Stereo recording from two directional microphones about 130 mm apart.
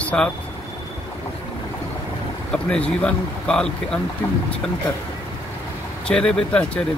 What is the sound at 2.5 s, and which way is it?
Speech, 5° left (ahead or behind).